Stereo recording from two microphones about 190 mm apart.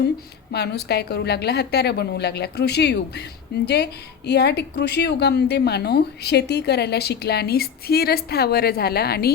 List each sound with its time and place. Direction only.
0.5 s speech: 60° left (ahead or behind)